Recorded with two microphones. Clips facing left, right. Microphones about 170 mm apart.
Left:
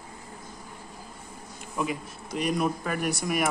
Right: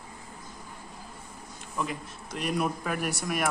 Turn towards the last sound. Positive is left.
turn(degrees=0)  # may be behind; listen again after turning